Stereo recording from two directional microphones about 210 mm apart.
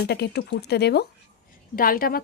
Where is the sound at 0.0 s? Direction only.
50° left (ahead or behind).